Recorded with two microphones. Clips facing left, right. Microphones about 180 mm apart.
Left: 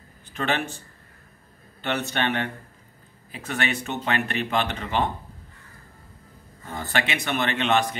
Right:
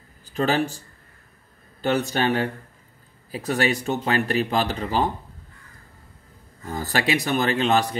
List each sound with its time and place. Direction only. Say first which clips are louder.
0.3 s speech: right 5 dB; 35° right (ahead or behind)
6.7 s speech: right 4 dB; 35° right (ahead or behind)